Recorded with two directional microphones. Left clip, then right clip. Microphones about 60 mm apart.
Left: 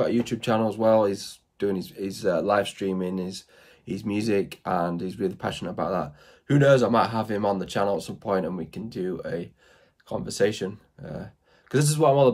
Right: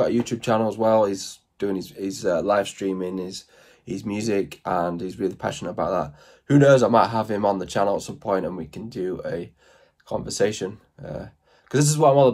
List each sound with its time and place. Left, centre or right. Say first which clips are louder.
0.0 s speech: right 3 dB; centre
0.5 s speech: right 2 dB; left
3.8 s speech: even; left
6.4 s speech: right 4 dB; centre